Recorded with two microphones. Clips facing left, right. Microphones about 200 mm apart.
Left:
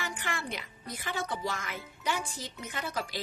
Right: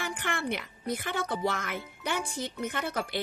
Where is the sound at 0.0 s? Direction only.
55° right (ahead or behind).